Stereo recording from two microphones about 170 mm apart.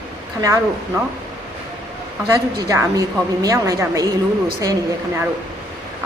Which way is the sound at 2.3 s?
15° right (ahead or behind).